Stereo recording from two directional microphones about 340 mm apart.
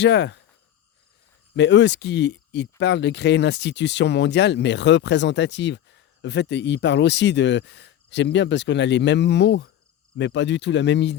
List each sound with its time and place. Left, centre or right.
0.0 s speech: left
1.5 s speech: left